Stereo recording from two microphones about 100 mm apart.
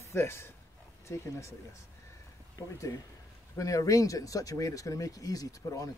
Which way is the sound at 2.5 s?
35° left (ahead or behind).